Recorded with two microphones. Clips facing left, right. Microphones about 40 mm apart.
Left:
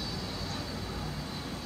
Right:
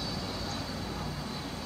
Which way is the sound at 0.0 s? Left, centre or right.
Centre.